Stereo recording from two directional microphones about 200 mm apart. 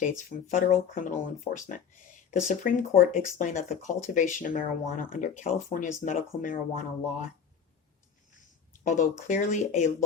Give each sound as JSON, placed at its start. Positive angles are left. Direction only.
{"t": 0.0, "sound": "speech", "side_deg": 40}
{"t": 8.8, "sound": "speech", "side_deg": 40}